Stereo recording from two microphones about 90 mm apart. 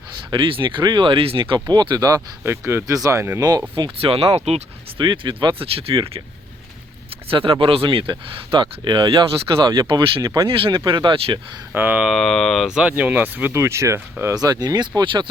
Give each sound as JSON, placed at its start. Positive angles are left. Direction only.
{"t": 0.3, "sound": "speech", "side_deg": -70}
{"t": 1.5, "sound": "speech", "side_deg": -55}
{"t": 2.4, "sound": "speech", "side_deg": -25}
{"t": 2.8, "sound": "speech", "side_deg": -40}
{"t": 3.8, "sound": "speech", "side_deg": -85}
{"t": 4.9, "sound": "speech", "side_deg": -65}
{"t": 7.3, "sound": "speech", "side_deg": -90}
{"t": 10.4, "sound": "speech", "side_deg": -65}
{"t": 11.7, "sound": "speech", "side_deg": -20}
{"t": 11.9, "sound": "speech", "side_deg": 0}
{"t": 13.5, "sound": "speech", "side_deg": -30}
{"t": 14.3, "sound": "speech", "side_deg": -50}
{"t": 15.0, "sound": "speech", "side_deg": -65}